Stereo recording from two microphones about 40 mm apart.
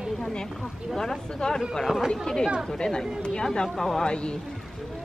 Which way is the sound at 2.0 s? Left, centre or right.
Centre.